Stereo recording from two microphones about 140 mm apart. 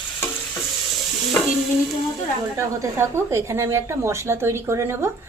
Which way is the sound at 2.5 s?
20° right (ahead or behind).